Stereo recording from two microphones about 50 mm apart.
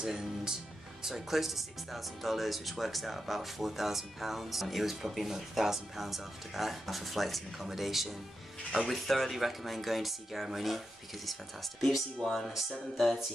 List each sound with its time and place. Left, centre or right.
0.0 s speech: centre
12.2 s speech: centre